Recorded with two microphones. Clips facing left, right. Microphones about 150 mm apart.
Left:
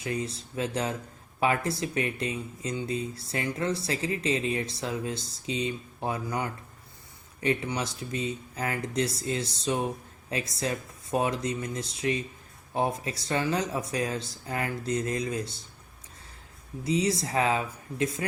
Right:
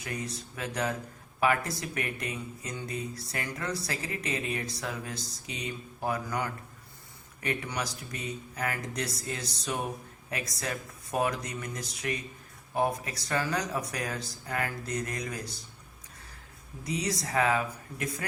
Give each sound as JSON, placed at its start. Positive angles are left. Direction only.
{"t": 0.0, "sound": "speech", "side_deg": 30}
{"t": 16.8, "sound": "speech", "side_deg": 25}